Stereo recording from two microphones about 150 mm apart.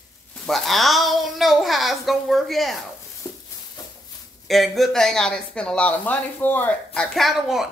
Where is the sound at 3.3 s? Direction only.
15° left (ahead or behind).